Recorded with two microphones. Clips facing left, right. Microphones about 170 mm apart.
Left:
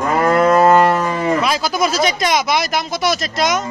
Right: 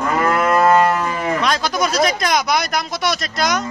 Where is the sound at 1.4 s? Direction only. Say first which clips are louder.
Left 1 dB; 5° left (ahead or behind).